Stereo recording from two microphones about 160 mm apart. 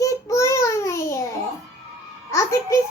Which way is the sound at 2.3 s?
15° left (ahead or behind).